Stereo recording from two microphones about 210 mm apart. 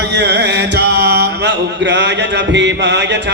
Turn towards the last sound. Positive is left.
turn(degrees=-55)  # may be behind; listen again after turning